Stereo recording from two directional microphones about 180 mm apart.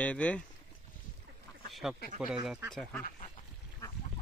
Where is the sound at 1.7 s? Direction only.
Centre (ahead or behind).